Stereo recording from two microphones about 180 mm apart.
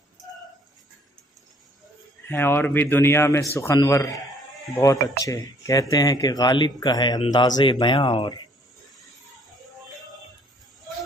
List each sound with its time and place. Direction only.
2.2 s a man's voice: 10° left (ahead or behind)